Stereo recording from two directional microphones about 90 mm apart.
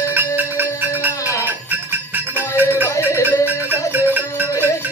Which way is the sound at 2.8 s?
35° left (ahead or behind).